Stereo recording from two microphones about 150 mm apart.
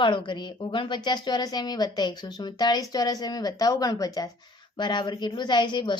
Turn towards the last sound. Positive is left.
turn(degrees=30)  # may be behind; listen again after turning